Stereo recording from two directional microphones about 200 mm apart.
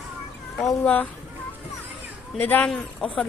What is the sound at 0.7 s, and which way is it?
Speech, 10° left (ahead or behind).